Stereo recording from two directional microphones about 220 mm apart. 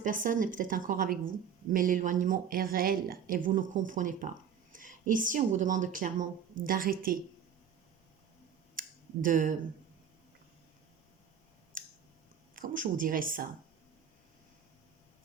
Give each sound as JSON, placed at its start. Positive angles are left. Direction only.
{"t": 0.0, "sound": "a woman's voice", "side_deg": -35}
{"t": 9.2, "sound": "a woman's voice", "side_deg": -35}
{"t": 11.7, "sound": "a sound", "side_deg": -40}
{"t": 12.5, "sound": "a woman's voice", "side_deg": -35}